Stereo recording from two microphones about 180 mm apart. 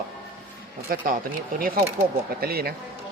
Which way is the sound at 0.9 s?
55° right (ahead or behind).